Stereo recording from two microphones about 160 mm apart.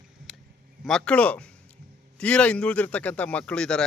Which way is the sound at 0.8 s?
5° left (ahead or behind).